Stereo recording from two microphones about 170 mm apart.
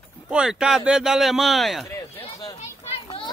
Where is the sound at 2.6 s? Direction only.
40° left (ahead or behind).